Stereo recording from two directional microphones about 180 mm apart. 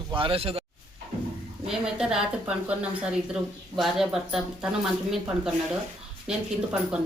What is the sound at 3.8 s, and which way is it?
Speech, centre (ahead or behind).